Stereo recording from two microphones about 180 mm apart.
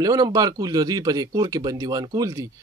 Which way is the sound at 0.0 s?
20° right (ahead or behind).